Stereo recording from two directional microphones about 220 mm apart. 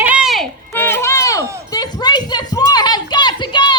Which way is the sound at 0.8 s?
10° left (ahead or behind).